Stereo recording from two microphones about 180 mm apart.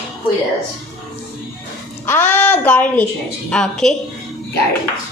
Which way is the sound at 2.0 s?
10° left (ahead or behind).